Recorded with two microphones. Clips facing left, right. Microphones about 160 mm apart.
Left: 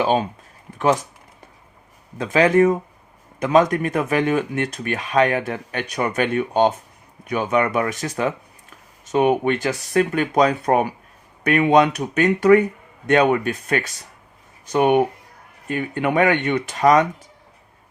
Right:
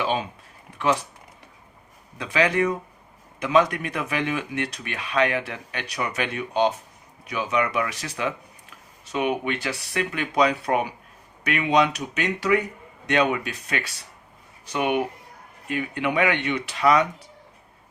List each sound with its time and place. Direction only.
0.0 s speech: 45° left (ahead or behind)
2.1 s speech: 45° left (ahead or behind)